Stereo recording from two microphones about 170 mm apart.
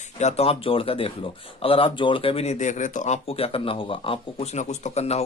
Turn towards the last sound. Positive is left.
turn(degrees=40)  # may be behind; listen again after turning